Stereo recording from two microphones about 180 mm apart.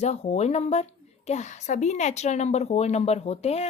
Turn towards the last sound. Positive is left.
turn(degrees=35)  # may be behind; listen again after turning